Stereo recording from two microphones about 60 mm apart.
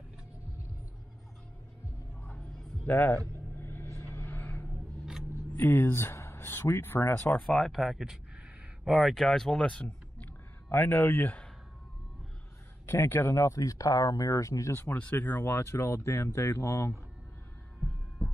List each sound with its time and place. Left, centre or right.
2.8 s a man's voice: left
3.5 s vehicle: left
4.4 s vehicle: left
5.6 s speech: left
7.4 s speech: centre
7.7 s speech: centre
9.1 s speech: centre
10.7 s speech: left
12.8 s speech: left
13.4 s speech: left
14.8 s speech: left